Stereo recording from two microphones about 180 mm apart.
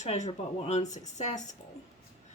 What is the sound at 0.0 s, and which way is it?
Speech, 40° left (ahead or behind).